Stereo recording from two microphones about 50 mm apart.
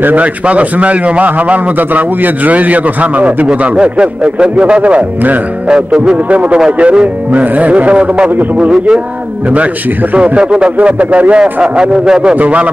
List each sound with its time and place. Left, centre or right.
0.0 s a man's voice: right
3.4 s speech: centre
5.7 s speech: centre
10.1 s speech: right